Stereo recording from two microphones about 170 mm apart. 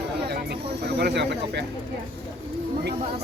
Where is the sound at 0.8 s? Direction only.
75° right (ahead or behind).